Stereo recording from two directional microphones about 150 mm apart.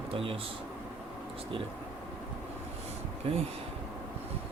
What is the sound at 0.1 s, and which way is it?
Speech, 40° right (ahead or behind).